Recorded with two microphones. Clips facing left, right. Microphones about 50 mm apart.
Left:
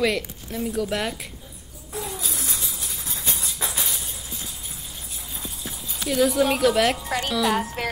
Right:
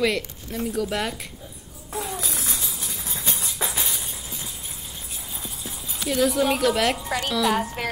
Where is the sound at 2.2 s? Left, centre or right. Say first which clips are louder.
Right 1 dB; right.